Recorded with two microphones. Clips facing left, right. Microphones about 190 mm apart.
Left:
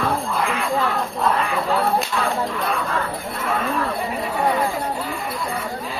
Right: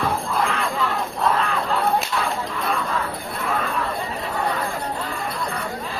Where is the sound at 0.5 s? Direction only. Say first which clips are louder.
Left 2 dB; 5° left (ahead or behind).